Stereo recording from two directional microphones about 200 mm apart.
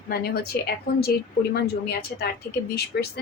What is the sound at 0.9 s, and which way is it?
Speech, 50° left (ahead or behind).